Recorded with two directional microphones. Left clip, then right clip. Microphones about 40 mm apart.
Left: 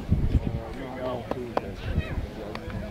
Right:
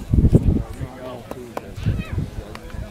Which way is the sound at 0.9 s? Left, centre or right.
Right.